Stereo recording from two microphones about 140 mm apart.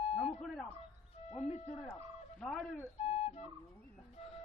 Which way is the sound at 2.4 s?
5° left (ahead or behind).